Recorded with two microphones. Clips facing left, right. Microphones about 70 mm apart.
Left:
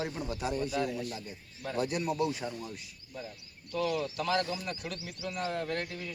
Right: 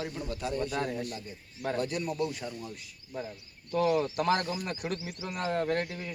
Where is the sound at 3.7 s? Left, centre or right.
Right.